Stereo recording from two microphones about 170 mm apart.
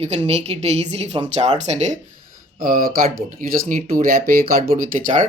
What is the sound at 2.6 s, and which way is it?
Speech, 55° right (ahead or behind).